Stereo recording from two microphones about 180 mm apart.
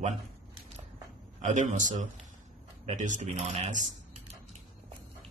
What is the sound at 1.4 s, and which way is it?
Speech, 45° right (ahead or behind).